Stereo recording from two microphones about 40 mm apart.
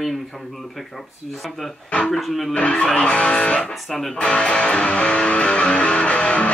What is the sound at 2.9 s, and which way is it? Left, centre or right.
Music, left.